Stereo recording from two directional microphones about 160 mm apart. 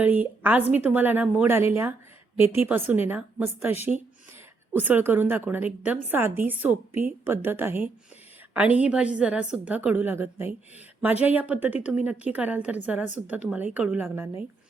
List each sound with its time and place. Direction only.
0.0 s a woman's voice: 10° right (ahead or behind)